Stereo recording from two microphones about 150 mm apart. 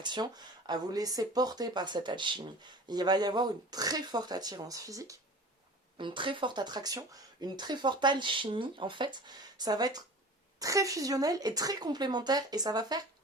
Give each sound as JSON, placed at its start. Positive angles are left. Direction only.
{"t": 0.0, "sound": "speech", "side_deg": -30}
{"t": 6.0, "sound": "speech", "side_deg": -35}